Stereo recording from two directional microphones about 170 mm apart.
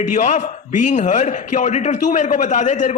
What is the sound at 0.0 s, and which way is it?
A man's voice, 45° left (ahead or behind).